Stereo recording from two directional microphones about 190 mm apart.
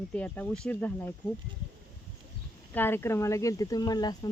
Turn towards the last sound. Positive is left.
turn(degrees=20)  # may be behind; listen again after turning